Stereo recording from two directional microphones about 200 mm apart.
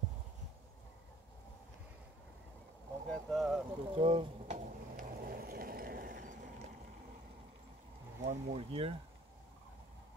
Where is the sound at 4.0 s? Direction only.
25° right (ahead or behind).